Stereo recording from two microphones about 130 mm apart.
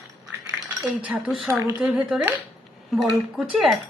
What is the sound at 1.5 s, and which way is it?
Speech, 20° right (ahead or behind).